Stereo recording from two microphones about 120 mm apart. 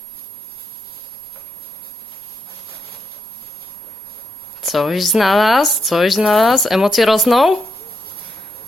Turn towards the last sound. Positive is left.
turn(degrees=0)  # may be behind; listen again after turning